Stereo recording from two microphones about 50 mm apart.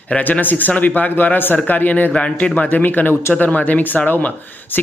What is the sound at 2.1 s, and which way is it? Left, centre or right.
Speech, left.